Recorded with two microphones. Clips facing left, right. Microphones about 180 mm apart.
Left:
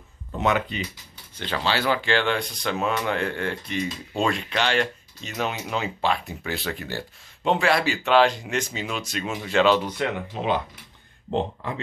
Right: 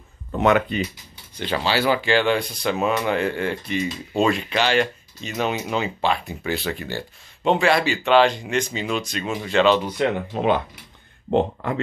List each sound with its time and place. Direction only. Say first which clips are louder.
0.4 s speech: right 5 dB; 60° right (ahead or behind)
1.3 s speech: right 3 dB; 10° right (ahead or behind); by 9.8 s 5° left (ahead or behind)
10.0 s speech: right 5 dB; 25° right (ahead or behind)
10.3 s speech: right 4 dB; 55° right (ahead or behind)